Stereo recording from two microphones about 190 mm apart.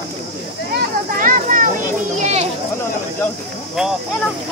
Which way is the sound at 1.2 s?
45° right (ahead or behind).